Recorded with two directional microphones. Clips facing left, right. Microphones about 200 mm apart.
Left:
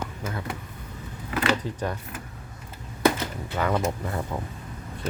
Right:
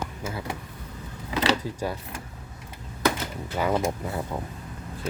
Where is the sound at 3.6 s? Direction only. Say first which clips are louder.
Even; 15° right (ahead or behind).